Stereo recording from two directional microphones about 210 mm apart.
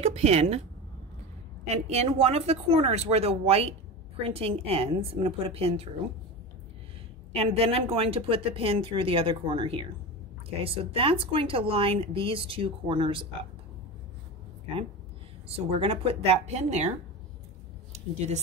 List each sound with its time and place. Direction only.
0.0 s a woman's voice: 30° right (ahead or behind)
1.7 s speech: 30° right (ahead or behind)
7.3 s speech: 30° right (ahead or behind)
15.4 s speech: 25° right (ahead or behind)
17.9 s speech: 30° right (ahead or behind)